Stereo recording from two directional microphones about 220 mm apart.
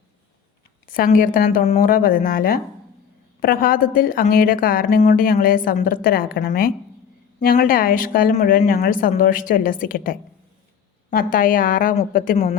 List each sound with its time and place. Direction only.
0.9 s speech: 40° left (ahead or behind)